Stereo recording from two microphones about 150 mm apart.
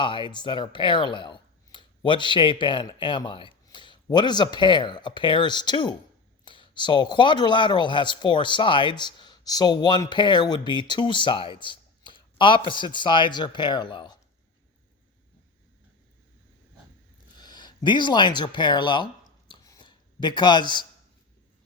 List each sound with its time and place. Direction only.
0.0 s speech: 35° left (ahead or behind)
17.3 s speech: 30° left (ahead or behind)
19.5 s a sound: 25° left (ahead or behind)